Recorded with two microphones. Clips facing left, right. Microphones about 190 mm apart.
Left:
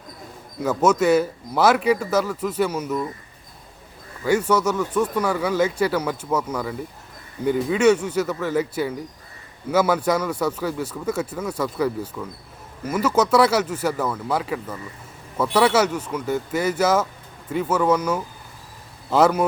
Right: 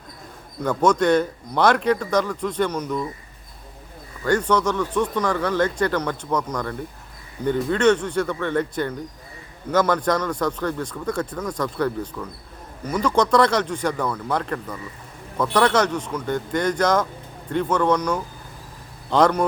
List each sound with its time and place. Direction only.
0.6 s speech: 5° left (ahead or behind)
4.2 s speech: 10° left (ahead or behind)